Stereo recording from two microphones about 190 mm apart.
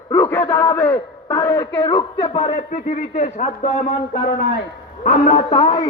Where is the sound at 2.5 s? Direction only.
40° left (ahead or behind).